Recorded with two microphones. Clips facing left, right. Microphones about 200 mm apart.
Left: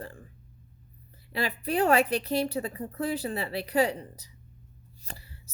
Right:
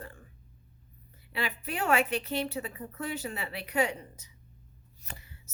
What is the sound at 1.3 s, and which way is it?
Speech, 35° left (ahead or behind).